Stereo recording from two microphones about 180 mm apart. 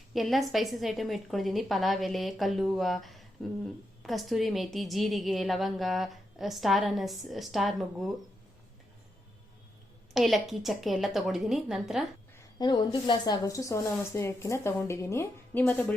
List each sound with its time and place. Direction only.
0.1 s a woman's voice: centre (ahead or behind)
10.2 s a woman's voice: centre (ahead or behind)
12.5 s a woman's voice: 25° left (ahead or behind)